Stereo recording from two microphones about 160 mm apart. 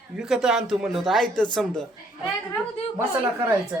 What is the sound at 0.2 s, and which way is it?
Speech, 5° right (ahead or behind).